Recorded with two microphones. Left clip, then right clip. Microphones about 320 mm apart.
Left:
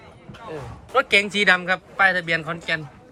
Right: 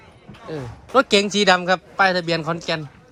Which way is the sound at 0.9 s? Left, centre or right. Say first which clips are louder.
Right 2 dB; centre.